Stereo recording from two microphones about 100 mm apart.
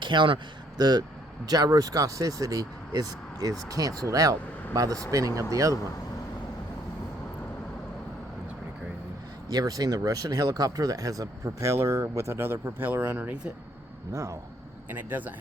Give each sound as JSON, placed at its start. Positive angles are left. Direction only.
{"t": 0.0, "sound": "speech", "side_deg": -50}
{"t": 9.5, "sound": "speech", "side_deg": -40}
{"t": 14.1, "sound": "speech", "side_deg": -30}
{"t": 14.8, "sound": "speech", "side_deg": -20}